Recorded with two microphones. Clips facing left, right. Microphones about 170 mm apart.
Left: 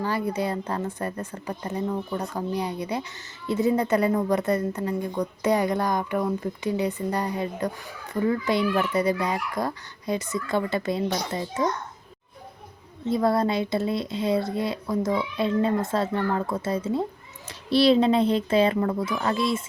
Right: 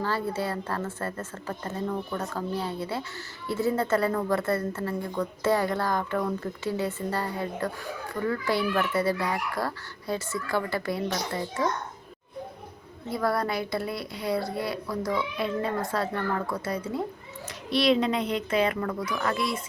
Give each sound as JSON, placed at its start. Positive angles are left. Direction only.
{"t": 0.0, "sound": "a woman's voice", "side_deg": 15}
{"t": 13.1, "sound": "speech", "side_deg": 20}